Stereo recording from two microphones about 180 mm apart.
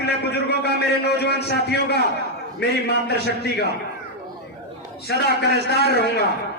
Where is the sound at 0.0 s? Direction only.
65° left (ahead or behind).